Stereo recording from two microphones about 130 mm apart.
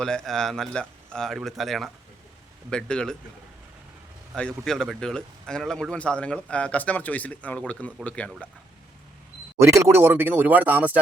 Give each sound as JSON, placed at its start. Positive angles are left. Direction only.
{"t": 0.0, "sound": "a man's voice", "side_deg": 5}
{"t": 4.4, "sound": "a man's voice", "side_deg": 5}
{"t": 9.6, "sound": "speech", "side_deg": -20}